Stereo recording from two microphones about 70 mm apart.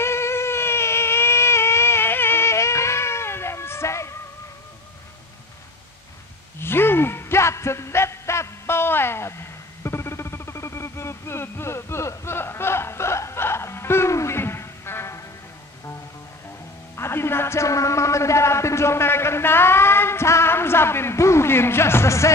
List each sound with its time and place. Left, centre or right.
0.0 s a sound: left
6.6 s music: left
16.9 s music: left